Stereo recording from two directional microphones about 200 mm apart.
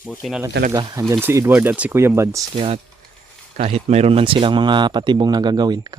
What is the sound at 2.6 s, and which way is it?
Speech, 30° right (ahead or behind).